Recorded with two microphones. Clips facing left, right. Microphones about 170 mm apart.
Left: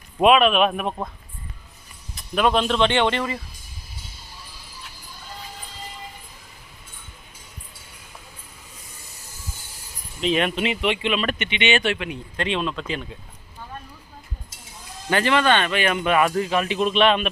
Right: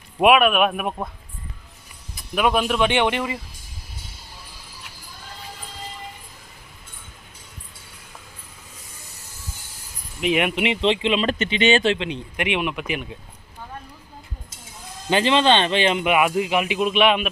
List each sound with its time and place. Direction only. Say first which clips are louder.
0.2 s speech: even; 10° right (ahead or behind)
2.1 s speech: even; 5° right (ahead or behind)
10.2 s speech: right 1 dB; 15° right (ahead or behind)
15.1 s speech: right 2 dB; 20° right (ahead or behind)